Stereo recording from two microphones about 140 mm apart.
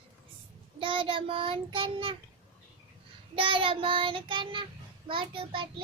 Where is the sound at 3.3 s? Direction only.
40° right (ahead or behind).